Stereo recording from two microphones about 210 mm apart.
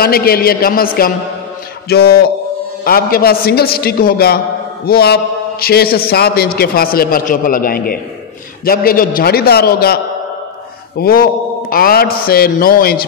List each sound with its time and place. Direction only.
0.0 s a man's voice: 45° left (ahead or behind)
11.0 s a man's voice: 45° left (ahead or behind)